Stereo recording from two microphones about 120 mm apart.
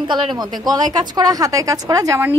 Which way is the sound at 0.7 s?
35° right (ahead or behind).